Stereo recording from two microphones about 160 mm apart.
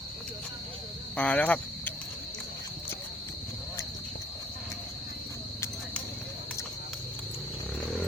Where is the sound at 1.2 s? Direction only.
10° left (ahead or behind).